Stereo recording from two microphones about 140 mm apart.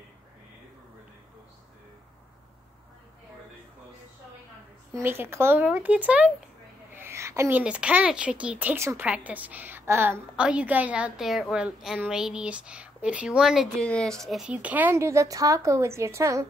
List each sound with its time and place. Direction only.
4.9 s a woman's voice: 15° right (ahead or behind)